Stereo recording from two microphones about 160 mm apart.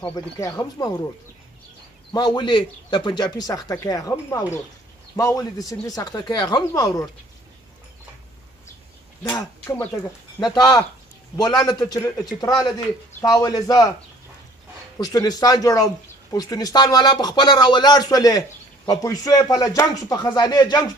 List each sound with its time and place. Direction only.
0.1 s speech: 25° left (ahead or behind)
2.1 s speech: 30° left (ahead or behind)
10.4 s speech: 25° left (ahead or behind)
15.0 s speech: 25° left (ahead or behind)